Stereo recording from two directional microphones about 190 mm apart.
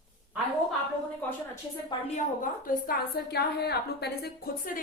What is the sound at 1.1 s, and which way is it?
Speech, 10° left (ahead or behind).